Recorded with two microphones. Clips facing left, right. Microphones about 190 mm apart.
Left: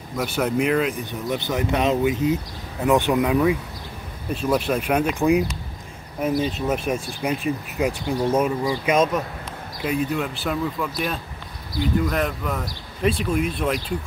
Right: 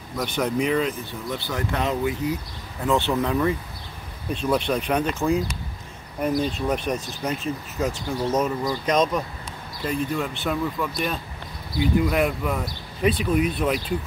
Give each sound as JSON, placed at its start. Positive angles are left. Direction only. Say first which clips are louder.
{"t": 0.2, "sound": "speech", "louder": "left 2 dB", "side_deg": 5}
{"t": 1.3, "sound": "speech", "louder": "left 5 dB", "side_deg": 20}